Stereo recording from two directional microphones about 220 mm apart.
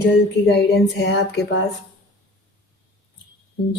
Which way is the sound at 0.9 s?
50° left (ahead or behind).